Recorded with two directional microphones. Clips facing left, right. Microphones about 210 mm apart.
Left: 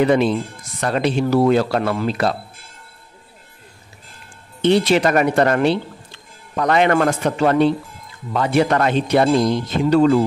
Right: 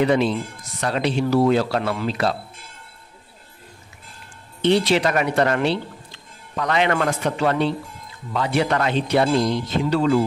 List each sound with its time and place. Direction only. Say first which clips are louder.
0.0 s speech: left 3 dB; 50° left (ahead or behind)
4.6 s speech: left 3 dB; 50° left (ahead or behind)